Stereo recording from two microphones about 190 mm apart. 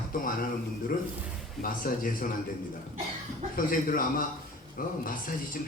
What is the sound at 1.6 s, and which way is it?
Speech, 45° left (ahead or behind).